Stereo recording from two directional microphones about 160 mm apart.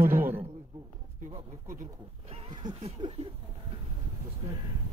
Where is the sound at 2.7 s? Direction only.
35° right (ahead or behind).